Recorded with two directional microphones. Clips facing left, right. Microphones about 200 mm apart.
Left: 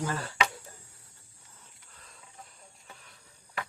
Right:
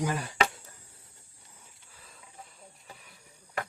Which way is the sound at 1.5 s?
10° right (ahead or behind).